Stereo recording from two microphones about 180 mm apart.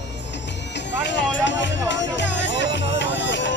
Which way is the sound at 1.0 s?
80° left.